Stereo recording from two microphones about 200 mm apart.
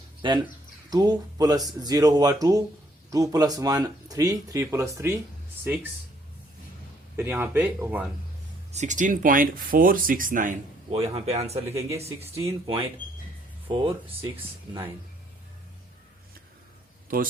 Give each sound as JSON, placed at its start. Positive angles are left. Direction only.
{"t": 0.2, "sound": "speech", "side_deg": -25}
{"t": 7.2, "sound": "speech", "side_deg": -10}
{"t": 8.7, "sound": "speech", "side_deg": -35}
{"t": 11.7, "sound": "speech", "side_deg": -15}
{"t": 11.9, "sound": "speech", "side_deg": -30}
{"t": 17.1, "sound": "speech", "side_deg": -45}